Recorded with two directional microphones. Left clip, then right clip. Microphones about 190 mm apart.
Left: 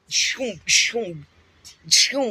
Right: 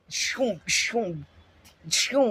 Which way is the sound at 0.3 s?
20° right (ahead or behind).